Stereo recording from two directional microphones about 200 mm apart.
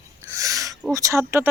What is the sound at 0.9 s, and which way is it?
Speech, 15° right (ahead or behind).